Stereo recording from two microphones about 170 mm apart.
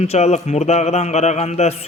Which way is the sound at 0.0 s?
40° left (ahead or behind).